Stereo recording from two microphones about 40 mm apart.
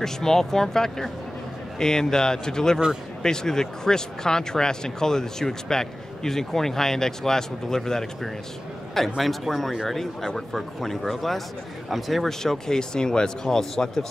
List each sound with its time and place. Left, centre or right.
0.0 s speech: centre
9.2 s speech: centre